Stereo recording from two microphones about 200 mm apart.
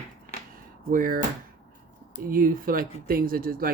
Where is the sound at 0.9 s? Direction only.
45° right (ahead or behind).